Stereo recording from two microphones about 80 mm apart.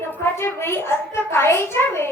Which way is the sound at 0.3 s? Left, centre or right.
Left.